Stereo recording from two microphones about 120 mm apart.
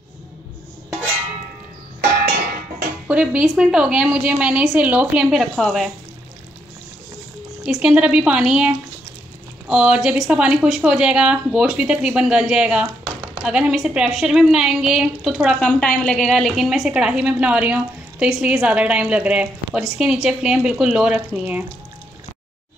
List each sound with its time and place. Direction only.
3.1 s a woman's voice: 10° right (ahead or behind)
7.6 s a woman's voice: 10° right (ahead or behind)
15.6 s a woman's voice: 10° left (ahead or behind); by 21.6 s 10° right (ahead or behind)